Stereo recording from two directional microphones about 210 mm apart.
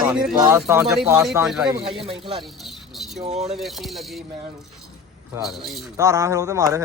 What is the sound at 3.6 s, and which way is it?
Speech, centre (ahead or behind).